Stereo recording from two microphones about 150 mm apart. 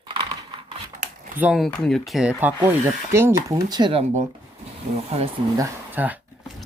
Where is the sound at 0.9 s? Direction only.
65° right (ahead or behind).